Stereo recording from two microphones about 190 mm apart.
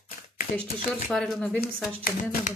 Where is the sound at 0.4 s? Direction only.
50° left (ahead or behind).